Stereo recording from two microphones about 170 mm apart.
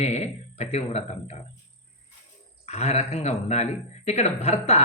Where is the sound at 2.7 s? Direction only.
40° left (ahead or behind).